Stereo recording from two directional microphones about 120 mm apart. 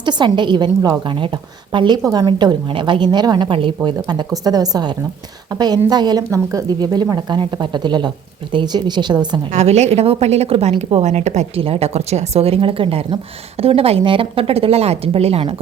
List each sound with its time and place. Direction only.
0.0 s a woman's voice: 40° right (ahead or behind)
9.5 s a woman's voice: 70° right (ahead or behind); by 15.5 s 55° right (ahead or behind)